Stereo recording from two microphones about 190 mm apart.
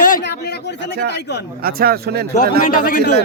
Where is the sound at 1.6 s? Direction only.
50° right (ahead or behind).